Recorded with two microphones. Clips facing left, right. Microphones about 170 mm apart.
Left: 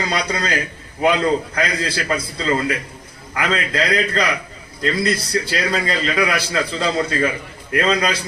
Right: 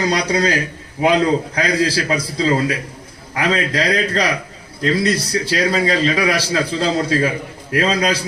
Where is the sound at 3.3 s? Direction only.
35° right (ahead or behind).